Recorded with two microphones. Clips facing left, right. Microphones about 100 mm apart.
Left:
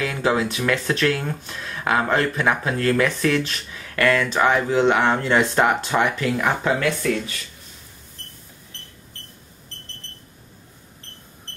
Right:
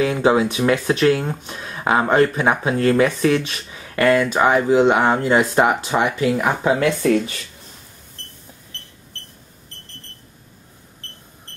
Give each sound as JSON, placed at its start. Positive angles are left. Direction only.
{"t": 0.0, "sound": "speech", "side_deg": -20}
{"t": 3.7, "sound": "a sound", "side_deg": -25}
{"t": 4.3, "sound": "speech", "side_deg": -15}
{"t": 6.8, "sound": "speech", "side_deg": -25}